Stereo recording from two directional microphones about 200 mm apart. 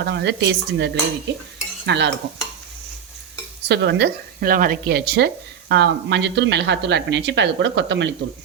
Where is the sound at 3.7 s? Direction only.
60° right (ahead or behind).